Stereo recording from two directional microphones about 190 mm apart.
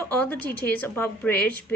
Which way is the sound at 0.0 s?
10° left (ahead or behind).